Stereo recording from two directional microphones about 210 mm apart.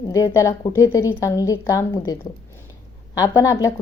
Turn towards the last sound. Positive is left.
turn(degrees=15)  # may be behind; listen again after turning